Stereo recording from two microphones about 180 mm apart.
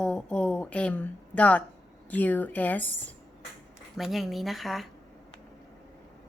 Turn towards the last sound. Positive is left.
turn(degrees=0)  # may be behind; listen again after turning